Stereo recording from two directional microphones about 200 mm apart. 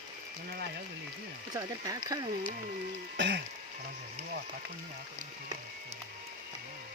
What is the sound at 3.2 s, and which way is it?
Speech, 60° right (ahead or behind).